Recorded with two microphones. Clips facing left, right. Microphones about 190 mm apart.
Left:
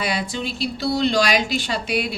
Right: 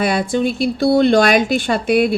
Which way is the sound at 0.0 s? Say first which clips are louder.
Right 9 dB; 50° right (ahead or behind).